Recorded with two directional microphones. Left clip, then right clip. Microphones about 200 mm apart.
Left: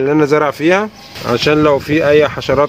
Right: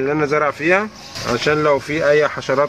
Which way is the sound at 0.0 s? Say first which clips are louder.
Left 5 dB; 55° left (ahead or behind).